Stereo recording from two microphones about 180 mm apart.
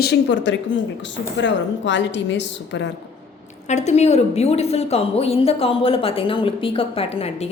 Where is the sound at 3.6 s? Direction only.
40° left (ahead or behind).